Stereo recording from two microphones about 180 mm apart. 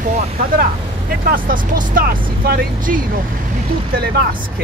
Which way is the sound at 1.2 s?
50° right (ahead or behind).